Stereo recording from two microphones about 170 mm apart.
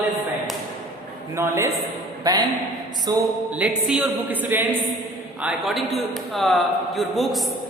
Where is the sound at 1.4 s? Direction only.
15° right (ahead or behind).